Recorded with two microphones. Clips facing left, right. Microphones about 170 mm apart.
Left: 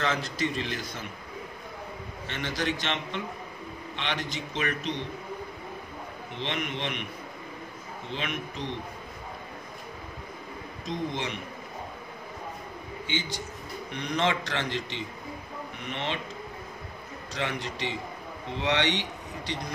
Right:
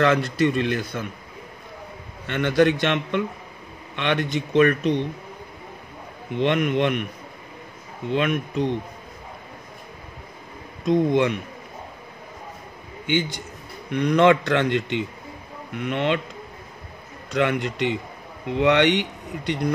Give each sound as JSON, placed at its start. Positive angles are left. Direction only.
{"t": 0.0, "sound": "speech", "side_deg": -65}
{"t": 2.2, "sound": "speech", "side_deg": -55}
{"t": 6.3, "sound": "a man's voice", "side_deg": -55}
{"t": 8.1, "sound": "a man's voice", "side_deg": -55}
{"t": 10.9, "sound": "speech", "side_deg": -55}
{"t": 13.0, "sound": "a man's voice", "side_deg": -55}
{"t": 15.9, "sound": "speech", "side_deg": -60}
{"t": 17.3, "sound": "speech", "side_deg": -60}